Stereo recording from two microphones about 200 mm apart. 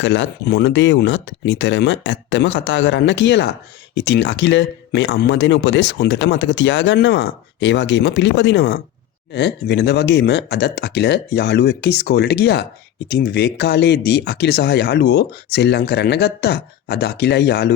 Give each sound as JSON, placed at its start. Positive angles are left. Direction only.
{"t": 0.0, "sound": "speech", "side_deg": 65}